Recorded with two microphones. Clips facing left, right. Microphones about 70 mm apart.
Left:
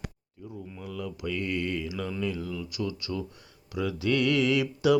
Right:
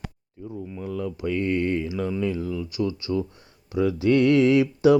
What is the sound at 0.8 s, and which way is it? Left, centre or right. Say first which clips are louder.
Mantra: right 7 dB; right.